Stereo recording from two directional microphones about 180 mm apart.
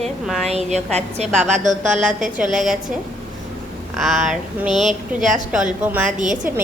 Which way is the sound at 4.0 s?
Centre (ahead or behind).